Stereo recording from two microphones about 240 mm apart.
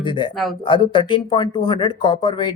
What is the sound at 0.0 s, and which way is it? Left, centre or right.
Speech, left.